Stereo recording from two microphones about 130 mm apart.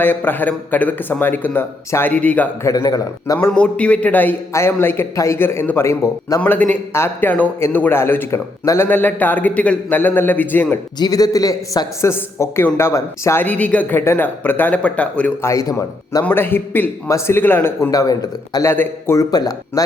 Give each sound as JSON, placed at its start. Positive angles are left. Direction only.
{"t": 0.0, "sound": "a man's voice", "side_deg": 15}
{"t": 2.6, "sound": "a man's voice", "side_deg": 30}
{"t": 3.3, "sound": "a man's voice", "side_deg": 10}
{"t": 11.0, "sound": "a man's voice", "side_deg": 30}
{"t": 15.4, "sound": "a man's voice", "side_deg": 25}
{"t": 16.2, "sound": "a man's voice", "side_deg": 15}